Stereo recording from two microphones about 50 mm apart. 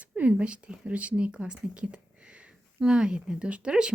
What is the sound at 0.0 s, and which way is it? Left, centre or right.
A woman's voice, right.